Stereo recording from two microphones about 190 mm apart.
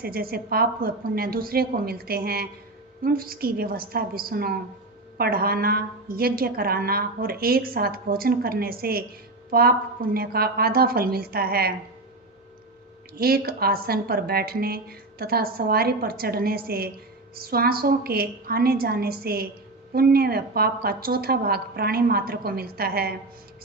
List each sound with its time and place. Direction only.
0.0 s a woman's voice: 50° right (ahead or behind)
13.1 s a woman's voice: 55° right (ahead or behind)